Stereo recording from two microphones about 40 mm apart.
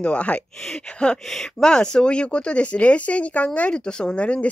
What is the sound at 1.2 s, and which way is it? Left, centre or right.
Speech, centre.